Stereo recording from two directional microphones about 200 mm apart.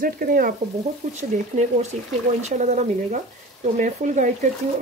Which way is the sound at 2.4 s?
35° right (ahead or behind).